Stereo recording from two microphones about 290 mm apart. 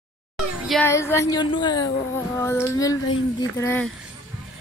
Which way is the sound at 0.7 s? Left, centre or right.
Centre.